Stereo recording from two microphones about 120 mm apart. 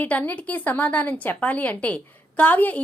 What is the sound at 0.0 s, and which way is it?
A woman's voice, 15° left (ahead or behind).